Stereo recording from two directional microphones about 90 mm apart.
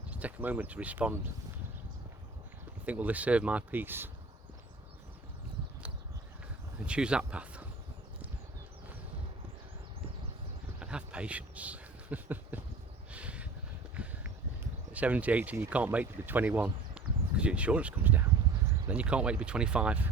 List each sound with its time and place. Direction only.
0.1 s speech: 15° right (ahead or behind)
2.8 s speech: 15° right (ahead or behind)
6.7 s speech: 10° right (ahead or behind)
10.8 s a sound: 10° right (ahead or behind)
14.9 s speech: 15° right (ahead or behind)